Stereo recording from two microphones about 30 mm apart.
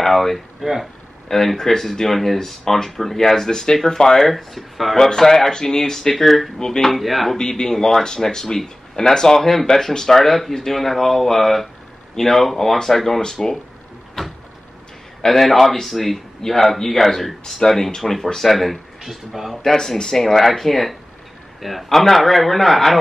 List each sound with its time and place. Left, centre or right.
0.0 s speech: centre
0.6 s speech: centre
1.3 s speech: centre
3.5 s speech: left
4.2 s a man's voice: centre
4.9 s speech: centre
6.2 s a man's voice: centre
6.6 s speech: centre
6.9 s a man's voice: centre
7.3 s speech: left
7.7 s speech: centre
9.4 s speech: centre
15.2 s a man's voice: centre
19.6 s a man's voice: centre